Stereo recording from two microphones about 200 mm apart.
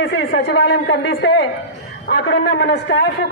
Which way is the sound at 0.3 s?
60° left (ahead or behind).